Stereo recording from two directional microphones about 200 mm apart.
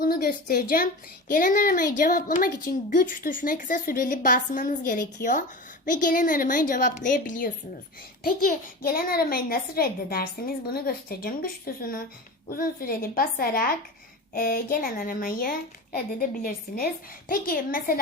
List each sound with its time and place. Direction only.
0.0 s a child's voice: 45° left (ahead or behind)